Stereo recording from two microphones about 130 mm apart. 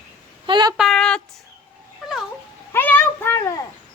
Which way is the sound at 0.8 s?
5° left (ahead or behind).